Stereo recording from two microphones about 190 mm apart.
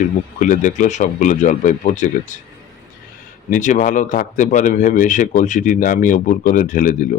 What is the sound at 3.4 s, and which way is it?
A man's voice, 40° left (ahead or behind).